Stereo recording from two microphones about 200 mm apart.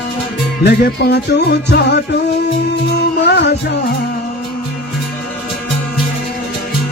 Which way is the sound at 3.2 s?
55° left (ahead or behind).